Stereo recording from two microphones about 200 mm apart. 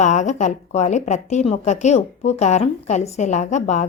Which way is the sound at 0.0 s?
35° left (ahead or behind).